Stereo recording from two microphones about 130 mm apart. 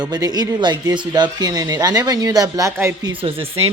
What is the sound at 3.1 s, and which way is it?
Speech, 45° right (ahead or behind).